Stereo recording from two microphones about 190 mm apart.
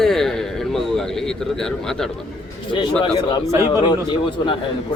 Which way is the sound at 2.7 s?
25° left (ahead or behind).